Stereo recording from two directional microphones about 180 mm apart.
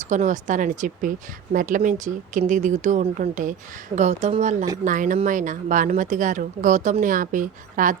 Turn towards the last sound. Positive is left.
turn(degrees=-45)  # may be behind; listen again after turning